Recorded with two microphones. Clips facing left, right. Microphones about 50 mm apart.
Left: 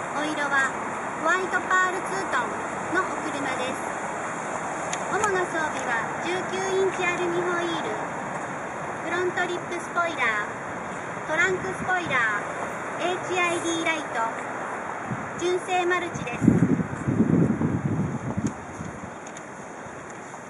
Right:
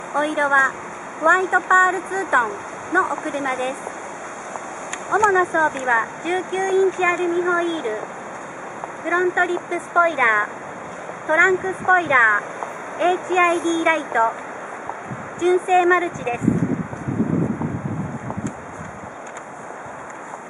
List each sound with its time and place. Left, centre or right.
0.1 s speech: centre
5.2 s speech: centre
9.1 s speech: right
15.4 s speech: centre